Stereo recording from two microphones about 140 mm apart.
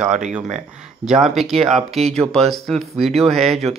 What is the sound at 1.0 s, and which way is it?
Speech, centre (ahead or behind).